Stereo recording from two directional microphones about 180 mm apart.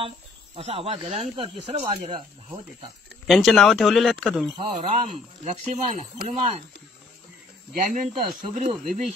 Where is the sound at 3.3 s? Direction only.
Centre (ahead or behind).